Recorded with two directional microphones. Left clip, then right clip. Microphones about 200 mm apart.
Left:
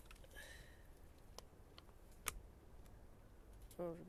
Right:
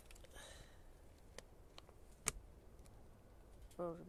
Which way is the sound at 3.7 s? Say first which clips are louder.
Right 2 dB; centre (ahead or behind).